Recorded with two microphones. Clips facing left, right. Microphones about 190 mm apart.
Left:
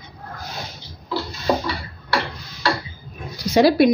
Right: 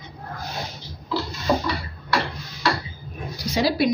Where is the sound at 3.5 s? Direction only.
55° left (ahead or behind).